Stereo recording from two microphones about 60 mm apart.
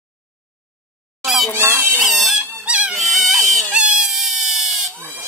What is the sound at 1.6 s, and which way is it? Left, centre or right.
Speech, right.